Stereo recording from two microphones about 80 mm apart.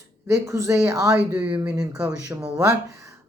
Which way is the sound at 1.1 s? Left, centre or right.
Centre.